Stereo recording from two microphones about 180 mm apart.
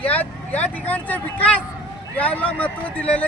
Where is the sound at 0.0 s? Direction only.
10° left (ahead or behind).